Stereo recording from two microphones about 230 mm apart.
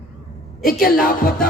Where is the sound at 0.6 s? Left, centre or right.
Left.